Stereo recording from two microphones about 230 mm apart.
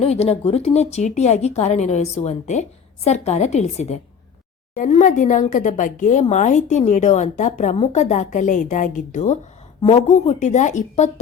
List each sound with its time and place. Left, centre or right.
0.0 s a woman's voice: left